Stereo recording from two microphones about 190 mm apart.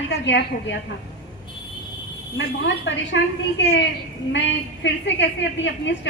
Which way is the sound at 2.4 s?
70° left (ahead or behind).